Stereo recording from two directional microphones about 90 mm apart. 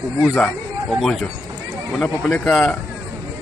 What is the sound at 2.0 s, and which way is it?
Speech, 10° left (ahead or behind).